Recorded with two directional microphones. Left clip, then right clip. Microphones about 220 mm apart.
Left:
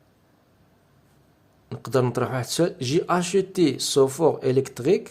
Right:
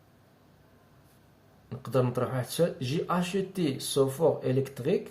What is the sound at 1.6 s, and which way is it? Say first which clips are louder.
Speech: left 5 dB; 50° left (ahead or behind).